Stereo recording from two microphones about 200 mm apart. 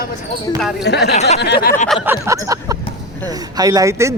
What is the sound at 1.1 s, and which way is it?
Speech, 35° left (ahead or behind).